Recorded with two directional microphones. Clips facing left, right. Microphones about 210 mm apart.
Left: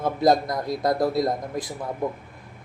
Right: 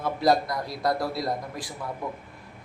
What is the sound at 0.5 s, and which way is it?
Speech, 50° left (ahead or behind).